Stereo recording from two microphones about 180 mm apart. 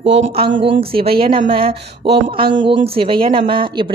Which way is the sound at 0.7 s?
30° right (ahead or behind).